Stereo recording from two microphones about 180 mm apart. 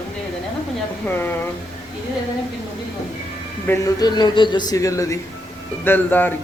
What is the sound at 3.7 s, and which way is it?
A man's voice, 20° left (ahead or behind).